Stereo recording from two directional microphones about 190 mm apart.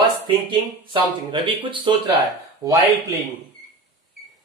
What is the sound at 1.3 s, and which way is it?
Speech, 25° right (ahead or behind).